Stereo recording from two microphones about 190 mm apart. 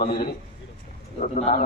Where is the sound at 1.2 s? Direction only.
35° left (ahead or behind).